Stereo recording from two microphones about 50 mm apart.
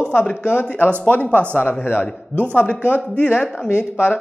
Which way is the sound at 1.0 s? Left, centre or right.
Left.